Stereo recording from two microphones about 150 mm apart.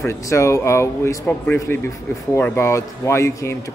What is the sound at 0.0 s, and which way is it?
A man's voice, 20° left (ahead or behind).